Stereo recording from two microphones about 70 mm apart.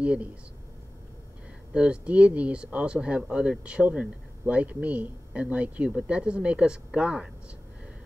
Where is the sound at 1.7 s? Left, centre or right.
Centre.